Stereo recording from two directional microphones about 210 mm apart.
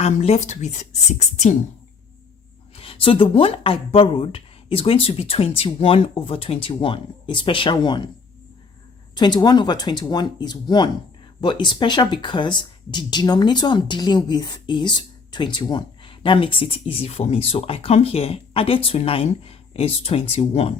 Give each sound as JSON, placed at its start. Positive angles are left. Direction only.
{"t": 0.0, "sound": "a woman's voice", "side_deg": 30}
{"t": 2.7, "sound": "speech", "side_deg": 25}
{"t": 9.1, "sound": "speech", "side_deg": 20}